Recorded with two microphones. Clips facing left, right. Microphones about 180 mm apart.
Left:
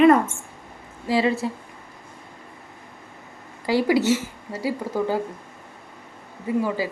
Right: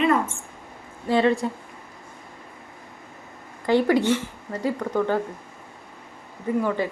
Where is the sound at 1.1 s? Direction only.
5° left (ahead or behind).